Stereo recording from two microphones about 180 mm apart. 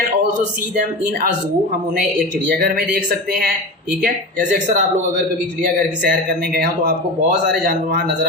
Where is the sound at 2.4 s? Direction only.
55° right (ahead or behind).